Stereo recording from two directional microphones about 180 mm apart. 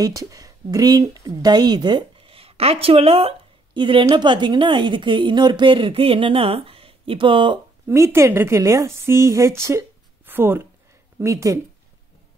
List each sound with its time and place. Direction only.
0.0 s a woman's voice: 20° right (ahead or behind)
7.8 s a woman's voice: 15° right (ahead or behind)